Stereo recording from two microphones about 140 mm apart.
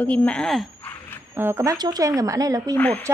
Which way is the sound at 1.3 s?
20° right (ahead or behind).